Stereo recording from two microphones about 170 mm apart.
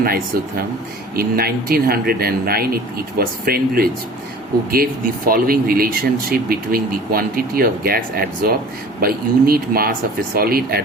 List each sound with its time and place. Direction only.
0.0 s speech: 65° right (ahead or behind)